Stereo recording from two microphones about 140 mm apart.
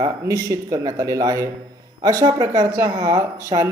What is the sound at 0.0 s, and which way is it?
A woman's voice, 25° right (ahead or behind).